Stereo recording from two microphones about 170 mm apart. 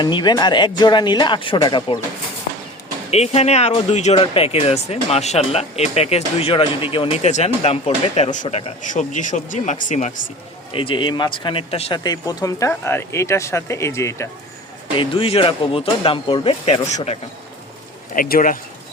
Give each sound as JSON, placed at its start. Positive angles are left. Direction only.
{"t": 0.0, "sound": "speech", "side_deg": 25}
{"t": 3.1, "sound": "speech", "side_deg": 40}
{"t": 10.7, "sound": "speech", "side_deg": 30}
{"t": 12.0, "sound": "speech", "side_deg": 20}
{"t": 14.9, "sound": "speech", "side_deg": 35}
{"t": 18.1, "sound": "speech", "side_deg": 55}